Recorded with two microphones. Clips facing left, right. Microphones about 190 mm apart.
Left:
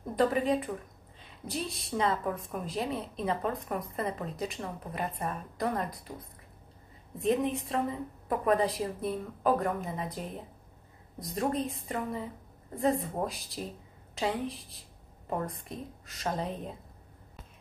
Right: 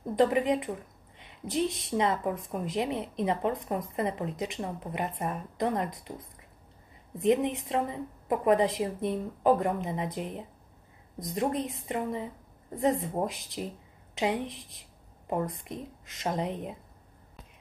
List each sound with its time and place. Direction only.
0.1 s a woman's voice: 20° right (ahead or behind)
7.2 s a woman's voice: 20° right (ahead or behind)